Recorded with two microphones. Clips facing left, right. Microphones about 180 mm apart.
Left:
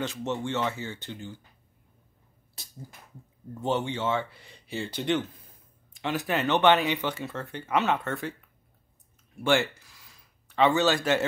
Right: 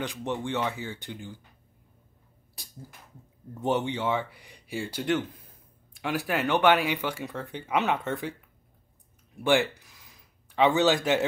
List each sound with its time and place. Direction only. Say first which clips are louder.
0.0 s speech: left 1 dB; 15° right (ahead or behind)
3.6 s speech: right 1 dB; 15° right (ahead or behind)
9.4 s speech: right 1 dB; 15° right (ahead or behind)